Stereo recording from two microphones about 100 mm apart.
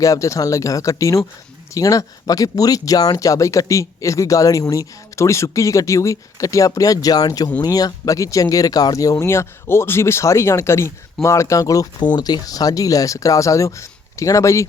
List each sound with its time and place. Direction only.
0.0 s speech: 35° left (ahead or behind)